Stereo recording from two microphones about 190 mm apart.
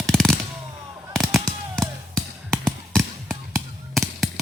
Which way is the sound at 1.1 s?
Centre (ahead or behind).